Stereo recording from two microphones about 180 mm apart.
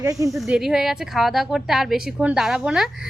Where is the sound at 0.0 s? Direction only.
20° right (ahead or behind).